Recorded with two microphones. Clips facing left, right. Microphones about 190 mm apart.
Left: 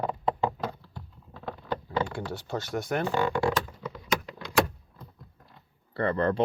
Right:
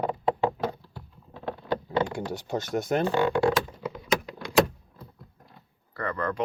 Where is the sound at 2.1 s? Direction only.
15° right (ahead or behind).